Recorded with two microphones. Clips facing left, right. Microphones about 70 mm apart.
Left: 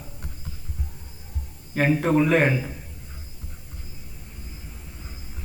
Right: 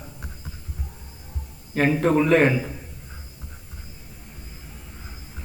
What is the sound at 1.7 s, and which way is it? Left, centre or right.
Speech, centre.